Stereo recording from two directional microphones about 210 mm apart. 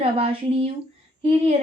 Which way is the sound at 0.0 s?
30° right (ahead or behind).